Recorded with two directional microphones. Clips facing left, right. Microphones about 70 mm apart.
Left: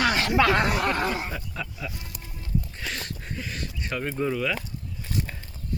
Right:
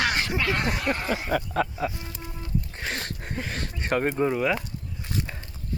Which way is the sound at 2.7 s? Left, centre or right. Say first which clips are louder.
Right 2 dB; right.